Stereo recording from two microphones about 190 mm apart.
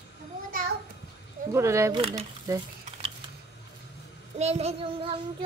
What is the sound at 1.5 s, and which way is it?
Speech, 15° right (ahead or behind).